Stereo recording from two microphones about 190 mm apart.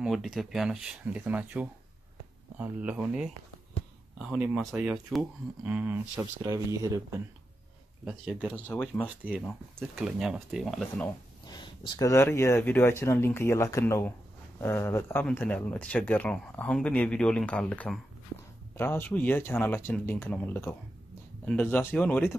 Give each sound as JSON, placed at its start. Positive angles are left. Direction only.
{"t": 0.0, "sound": "speech", "side_deg": 0}
{"t": 8.0, "sound": "speech", "side_deg": -5}
{"t": 8.5, "sound": "speech", "side_deg": 5}
{"t": 11.4, "sound": "speech", "side_deg": 25}